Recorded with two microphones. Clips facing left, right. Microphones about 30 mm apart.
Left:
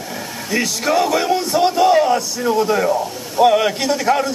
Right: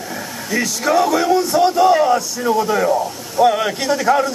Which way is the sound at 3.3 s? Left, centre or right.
Centre.